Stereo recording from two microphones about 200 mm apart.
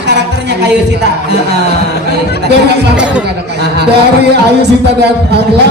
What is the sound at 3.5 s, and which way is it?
Speech, 55° right (ahead or behind).